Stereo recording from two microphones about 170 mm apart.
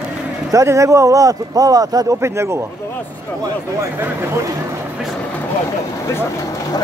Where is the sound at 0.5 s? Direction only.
20° right (ahead or behind).